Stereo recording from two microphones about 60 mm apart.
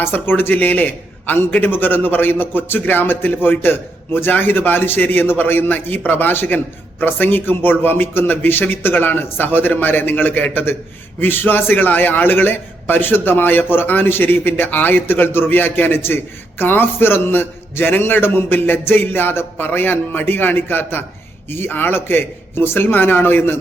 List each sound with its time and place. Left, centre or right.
0.0 s a man's voice: left